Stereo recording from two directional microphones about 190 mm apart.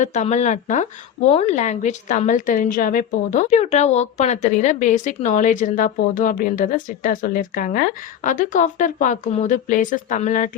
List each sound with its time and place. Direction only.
0.0 s a woman's voice: 40° left (ahead or behind)